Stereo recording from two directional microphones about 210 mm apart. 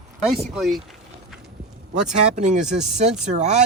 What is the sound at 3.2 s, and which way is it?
Speech, 35° right (ahead or behind).